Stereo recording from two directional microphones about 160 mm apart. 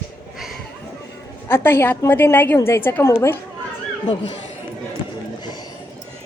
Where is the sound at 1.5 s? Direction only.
15° left (ahead or behind).